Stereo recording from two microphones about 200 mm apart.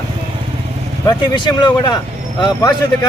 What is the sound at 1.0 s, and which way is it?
Speech, 20° left (ahead or behind).